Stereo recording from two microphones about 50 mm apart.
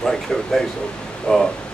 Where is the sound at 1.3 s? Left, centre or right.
Left.